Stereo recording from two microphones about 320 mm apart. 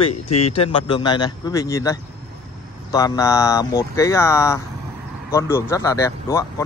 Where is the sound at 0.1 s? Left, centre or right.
Left.